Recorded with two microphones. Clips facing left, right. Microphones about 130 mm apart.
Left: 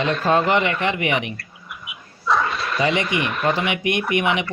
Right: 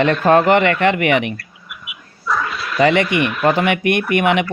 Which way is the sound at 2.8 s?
60° right (ahead or behind).